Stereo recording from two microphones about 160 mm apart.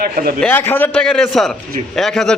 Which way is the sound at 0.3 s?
10° left (ahead or behind).